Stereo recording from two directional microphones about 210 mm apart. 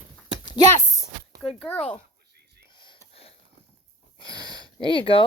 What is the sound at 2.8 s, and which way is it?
Whispering, 30° left (ahead or behind).